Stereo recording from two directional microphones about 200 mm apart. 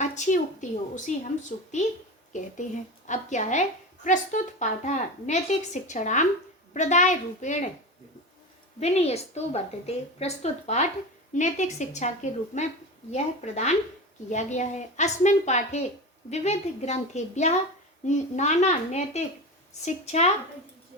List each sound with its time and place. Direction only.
0.0 s a sound: 35° left (ahead or behind)
0.9 s a woman's voice: 35° left (ahead or behind)
8.8 s a woman's voice: 30° left (ahead or behind)